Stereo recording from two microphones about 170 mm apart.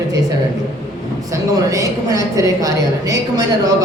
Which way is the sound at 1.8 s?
20° right (ahead or behind).